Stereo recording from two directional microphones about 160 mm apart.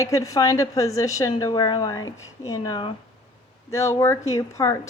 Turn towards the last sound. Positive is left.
turn(degrees=20)  # may be behind; listen again after turning